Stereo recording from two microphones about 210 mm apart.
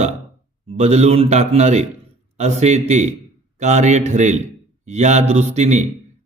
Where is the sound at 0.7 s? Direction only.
30° right (ahead or behind).